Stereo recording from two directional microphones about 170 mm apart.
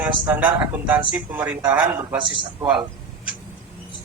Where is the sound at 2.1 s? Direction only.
30° right (ahead or behind).